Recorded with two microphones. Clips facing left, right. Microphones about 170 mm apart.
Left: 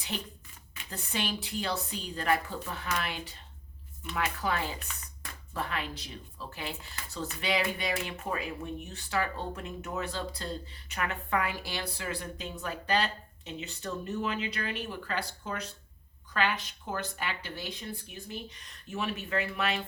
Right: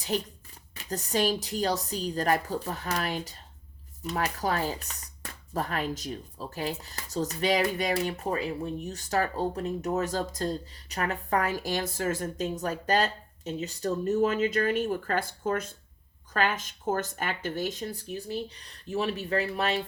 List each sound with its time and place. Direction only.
0.1 s speech: 40° right (ahead or behind)